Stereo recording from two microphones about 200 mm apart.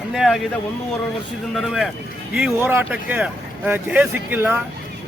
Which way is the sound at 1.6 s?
Centre (ahead or behind).